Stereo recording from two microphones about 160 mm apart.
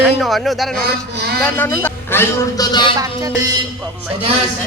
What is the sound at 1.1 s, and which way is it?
Speech, 75° right (ahead or behind).